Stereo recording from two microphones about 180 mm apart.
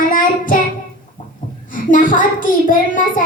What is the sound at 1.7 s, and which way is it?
A woman's voice, 50° left (ahead or behind).